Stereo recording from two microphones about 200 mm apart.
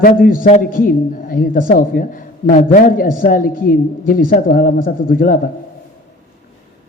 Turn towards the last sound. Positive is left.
turn(degrees=45)  # may be behind; listen again after turning